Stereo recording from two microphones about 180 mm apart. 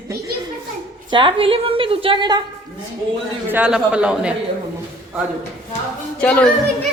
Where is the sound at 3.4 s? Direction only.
10° right (ahead or behind).